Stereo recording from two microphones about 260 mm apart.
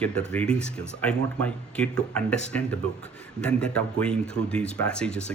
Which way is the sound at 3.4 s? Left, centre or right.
Centre.